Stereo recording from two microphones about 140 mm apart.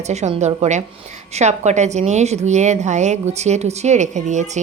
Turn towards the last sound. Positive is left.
turn(degrees=-55)  # may be behind; listen again after turning